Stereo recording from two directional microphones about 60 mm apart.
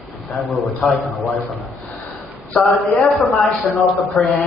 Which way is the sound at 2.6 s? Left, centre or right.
Left.